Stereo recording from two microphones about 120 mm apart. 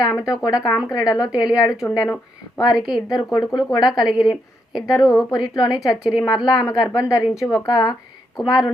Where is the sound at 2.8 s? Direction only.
Centre (ahead or behind).